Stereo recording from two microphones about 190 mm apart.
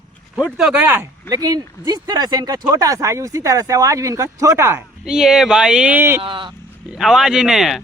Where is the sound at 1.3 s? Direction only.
20° right (ahead or behind).